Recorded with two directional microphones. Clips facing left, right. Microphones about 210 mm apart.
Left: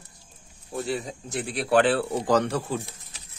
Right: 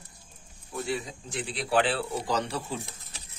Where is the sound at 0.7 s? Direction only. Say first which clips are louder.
Left 3 dB; 40° left (ahead or behind).